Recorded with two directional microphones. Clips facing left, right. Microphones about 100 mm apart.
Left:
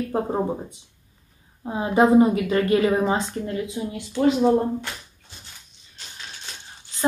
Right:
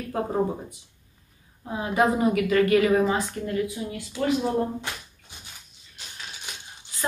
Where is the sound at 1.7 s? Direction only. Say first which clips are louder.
Left 5 dB; 30° left (ahead or behind).